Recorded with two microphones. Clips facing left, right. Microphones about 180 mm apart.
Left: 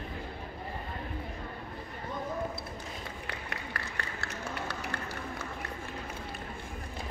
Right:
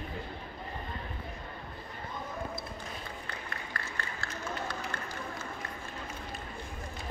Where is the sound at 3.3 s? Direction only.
70° left (ahead or behind).